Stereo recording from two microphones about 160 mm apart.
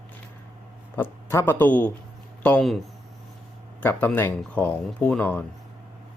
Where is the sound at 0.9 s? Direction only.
15° left (ahead or behind).